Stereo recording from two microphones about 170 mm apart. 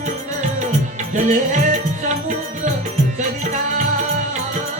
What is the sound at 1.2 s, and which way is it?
Music, 45° right (ahead or behind).